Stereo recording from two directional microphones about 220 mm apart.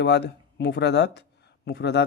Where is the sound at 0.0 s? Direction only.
50° left (ahead or behind).